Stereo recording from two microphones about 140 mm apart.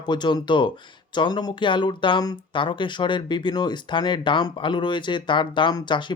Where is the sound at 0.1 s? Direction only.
30° left (ahead or behind).